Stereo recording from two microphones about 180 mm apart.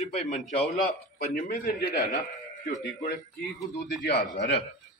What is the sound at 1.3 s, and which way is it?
Speech, 55° left (ahead or behind).